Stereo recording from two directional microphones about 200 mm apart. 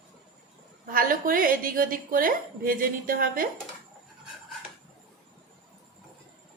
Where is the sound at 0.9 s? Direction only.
45° right (ahead or behind).